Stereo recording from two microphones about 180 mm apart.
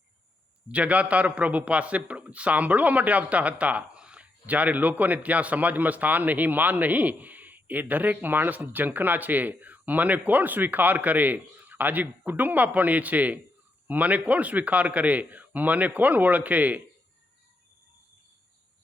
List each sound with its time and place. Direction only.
0.7 s a man's voice: 5° right (ahead or behind)